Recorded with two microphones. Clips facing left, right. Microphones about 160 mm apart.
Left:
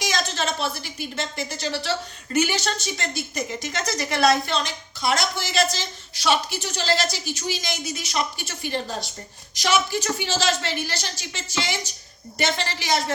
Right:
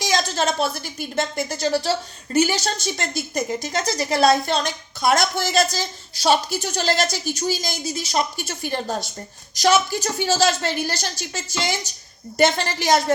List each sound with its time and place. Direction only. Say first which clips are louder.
0.0 s a woman's voice: right 4 dB; 35° right (ahead or behind)